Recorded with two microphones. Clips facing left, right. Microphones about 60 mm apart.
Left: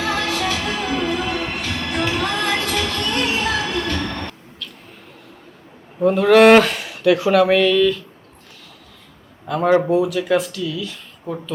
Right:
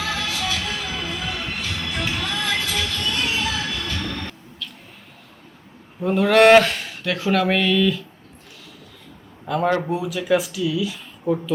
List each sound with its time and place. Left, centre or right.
0.0 s music: left
3.8 s train: left
6.1 s speech: centre
9.6 s speech: centre
9.9 s speech: centre